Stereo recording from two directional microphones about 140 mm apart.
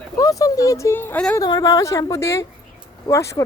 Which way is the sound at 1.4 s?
30° left (ahead or behind).